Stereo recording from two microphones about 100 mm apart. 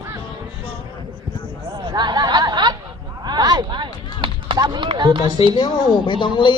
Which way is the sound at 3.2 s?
45° right (ahead or behind).